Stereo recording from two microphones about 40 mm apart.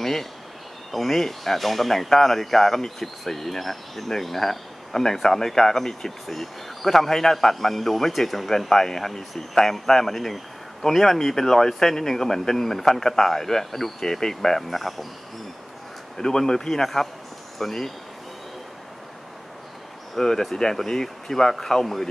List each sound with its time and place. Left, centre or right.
0.0 s speech: centre
16.2 s speech: centre
20.2 s speech: centre